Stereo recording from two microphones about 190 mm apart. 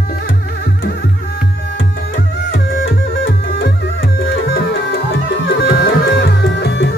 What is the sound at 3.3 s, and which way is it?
Music, 60° left (ahead or behind).